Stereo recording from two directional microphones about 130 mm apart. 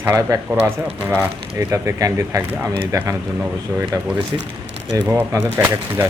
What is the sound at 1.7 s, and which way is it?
Speech, 25° right (ahead or behind).